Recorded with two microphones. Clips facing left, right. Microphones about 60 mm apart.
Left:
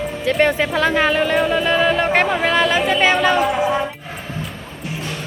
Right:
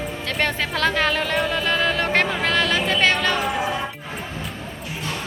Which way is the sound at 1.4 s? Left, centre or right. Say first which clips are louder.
Left 5 dB; centre.